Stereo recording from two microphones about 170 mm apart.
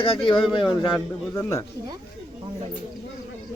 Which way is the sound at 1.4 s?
15° left (ahead or behind).